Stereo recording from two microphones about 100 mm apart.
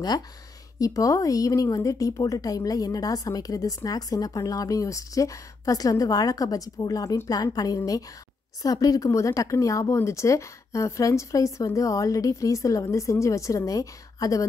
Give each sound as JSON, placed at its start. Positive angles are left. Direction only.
{"t": 0.7, "sound": "speech", "side_deg": 35}